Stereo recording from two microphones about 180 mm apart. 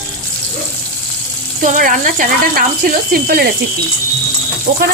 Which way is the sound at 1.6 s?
45° right (ahead or behind).